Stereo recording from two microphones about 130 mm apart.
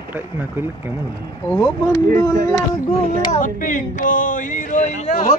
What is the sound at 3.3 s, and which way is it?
Speech, 90° left.